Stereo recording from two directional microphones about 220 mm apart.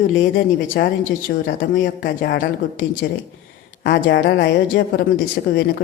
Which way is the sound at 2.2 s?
55° left (ahead or behind).